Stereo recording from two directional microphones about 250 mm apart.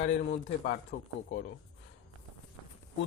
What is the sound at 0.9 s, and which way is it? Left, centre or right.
Speech, left.